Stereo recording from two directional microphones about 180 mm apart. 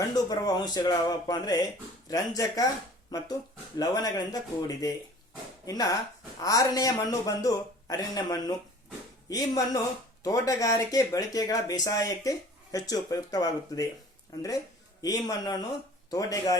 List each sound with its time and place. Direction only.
0.1 s a man's voice: 20° left (ahead or behind)
15.0 s a man's voice: 20° left (ahead or behind)